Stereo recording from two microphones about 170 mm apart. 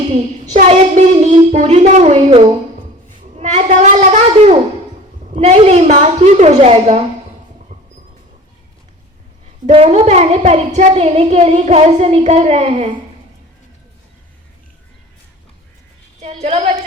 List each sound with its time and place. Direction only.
0.1 s child singing: 40° right (ahead or behind)
3.3 s a sound: 40° right (ahead or behind)
9.6 s a woman's voice: 40° right (ahead or behind)
16.2 s a woman's voice: 40° right (ahead or behind)